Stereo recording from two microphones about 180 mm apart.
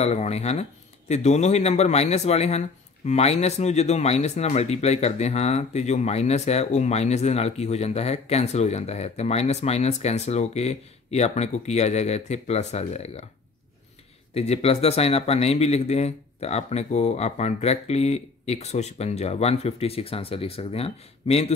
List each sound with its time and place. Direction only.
0.0 s speech: 35° left (ahead or behind)
14.3 s speech: 35° left (ahead or behind)